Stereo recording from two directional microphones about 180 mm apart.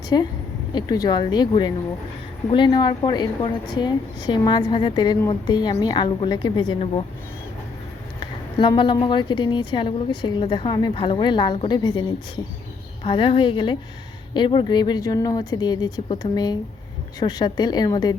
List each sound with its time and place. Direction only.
0.1 s a woman's voice: 25° left (ahead or behind)
8.2 s a woman's voice: 25° left (ahead or behind)
13.1 s a woman's voice: 30° left (ahead or behind)